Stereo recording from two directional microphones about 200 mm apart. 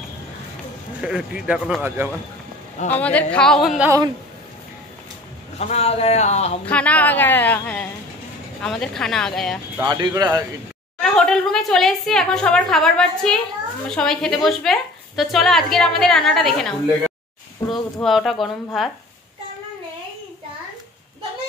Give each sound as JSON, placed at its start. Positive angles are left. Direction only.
{"t": 1.0, "sound": "speech", "side_deg": -5}
{"t": 2.9, "sound": "a woman's voice", "side_deg": 5}
{"t": 5.6, "sound": "speech", "side_deg": 30}
{"t": 6.6, "sound": "a woman's voice", "side_deg": 5}
{"t": 9.8, "sound": "speech", "side_deg": -20}
{"t": 11.0, "sound": "a woman's voice", "side_deg": 0}
{"t": 17.6, "sound": "a woman's voice", "side_deg": 15}
{"t": 18.0, "sound": "a woman's voice", "side_deg": 0}